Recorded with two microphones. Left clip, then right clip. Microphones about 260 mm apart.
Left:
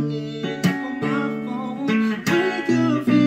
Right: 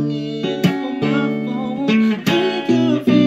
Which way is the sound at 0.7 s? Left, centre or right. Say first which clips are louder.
Right 1 dB; right.